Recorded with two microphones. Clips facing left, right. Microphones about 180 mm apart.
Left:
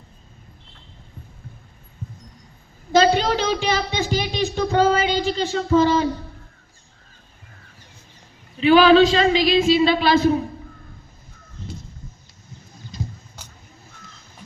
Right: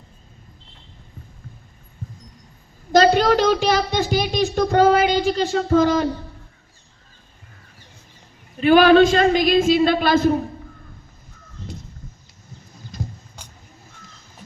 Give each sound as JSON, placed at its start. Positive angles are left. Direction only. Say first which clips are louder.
{"t": 2.9, "sound": "a woman's voice", "louder": "right 2 dB", "side_deg": -45}
{"t": 3.6, "sound": "child singing", "louder": "right 3 dB", "side_deg": -40}
{"t": 5.0, "sound": "music", "louder": "right 3 dB", "side_deg": -45}
{"t": 5.5, "sound": "a woman's voice", "louder": "left 2 dB", "side_deg": -45}
{"t": 8.5, "sound": "a woman's voice", "louder": "right 1 dB", "side_deg": -50}